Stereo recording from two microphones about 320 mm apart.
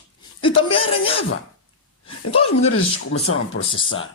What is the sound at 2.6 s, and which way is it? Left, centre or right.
Speech, left.